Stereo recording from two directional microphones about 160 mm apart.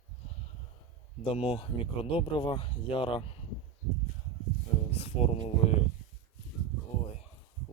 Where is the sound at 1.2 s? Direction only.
35° left (ahead or behind).